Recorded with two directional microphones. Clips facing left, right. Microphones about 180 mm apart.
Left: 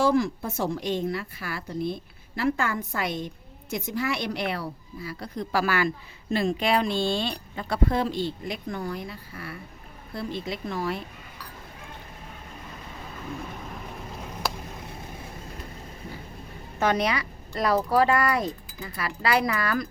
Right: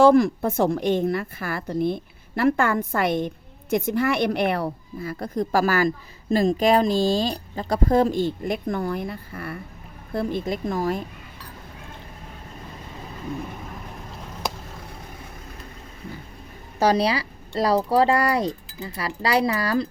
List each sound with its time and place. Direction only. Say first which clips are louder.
0.0 s a woman's voice: right 7 dB; 55° right (ahead or behind)
16.8 s speech: right 4 dB; 30° right (ahead or behind)